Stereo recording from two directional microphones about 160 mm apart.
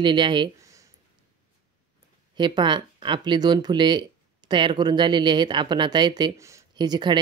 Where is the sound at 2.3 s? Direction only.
30° right (ahead or behind).